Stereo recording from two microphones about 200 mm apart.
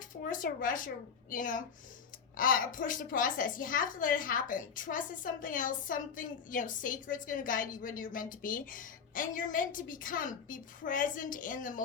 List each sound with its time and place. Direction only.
0.2 s a woman's voice: 45° left (ahead or behind)